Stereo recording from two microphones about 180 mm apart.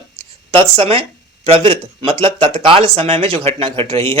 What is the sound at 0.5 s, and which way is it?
Speech, 30° right (ahead or behind).